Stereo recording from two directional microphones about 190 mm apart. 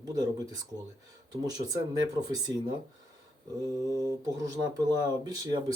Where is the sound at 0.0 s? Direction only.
20° right (ahead or behind).